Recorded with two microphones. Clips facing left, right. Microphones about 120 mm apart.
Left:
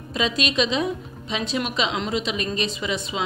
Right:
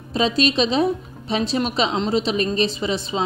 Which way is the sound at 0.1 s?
35° right (ahead or behind).